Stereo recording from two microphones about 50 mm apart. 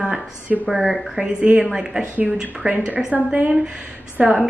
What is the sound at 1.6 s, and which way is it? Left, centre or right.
A woman's voice, centre.